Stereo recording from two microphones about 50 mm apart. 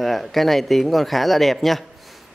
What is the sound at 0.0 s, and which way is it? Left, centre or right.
Speech, centre.